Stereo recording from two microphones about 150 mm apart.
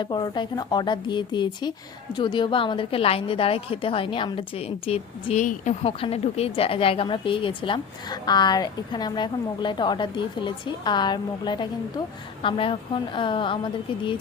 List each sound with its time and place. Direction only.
0.0 s a woman's voice: 30° left (ahead or behind); by 5.7 s 55° left (ahead or behind)
5.8 s a woman's voice: 40° left (ahead or behind)